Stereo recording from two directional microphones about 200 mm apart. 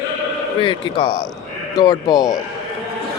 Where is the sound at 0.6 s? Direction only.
25° left (ahead or behind).